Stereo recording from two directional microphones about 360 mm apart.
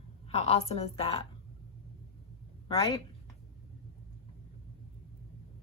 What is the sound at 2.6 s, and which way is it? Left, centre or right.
Speech, centre.